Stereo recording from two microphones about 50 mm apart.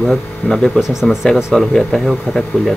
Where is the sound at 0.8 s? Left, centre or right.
Centre.